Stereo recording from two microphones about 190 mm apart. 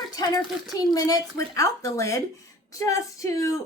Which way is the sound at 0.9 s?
20° left (ahead or behind).